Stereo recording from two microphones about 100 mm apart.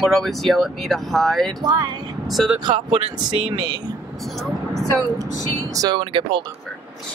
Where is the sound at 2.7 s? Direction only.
65° right (ahead or behind).